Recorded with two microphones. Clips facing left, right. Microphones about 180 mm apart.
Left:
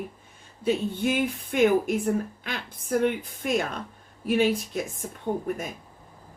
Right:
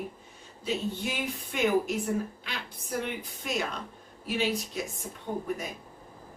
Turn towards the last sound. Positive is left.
turn(degrees=50)  # may be behind; listen again after turning